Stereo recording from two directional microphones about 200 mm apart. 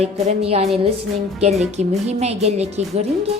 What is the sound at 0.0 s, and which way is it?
Speech, 30° right (ahead or behind).